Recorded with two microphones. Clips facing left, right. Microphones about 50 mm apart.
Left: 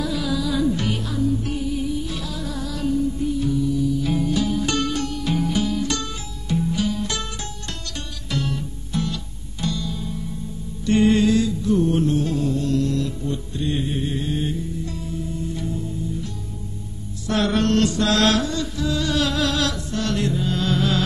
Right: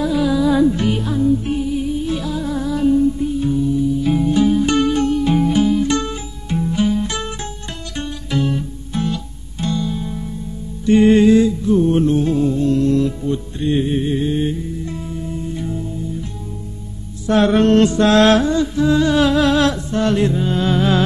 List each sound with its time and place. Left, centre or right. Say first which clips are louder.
0.0 s music: right 8 dB; right
17.3 s mantra: right 7 dB; right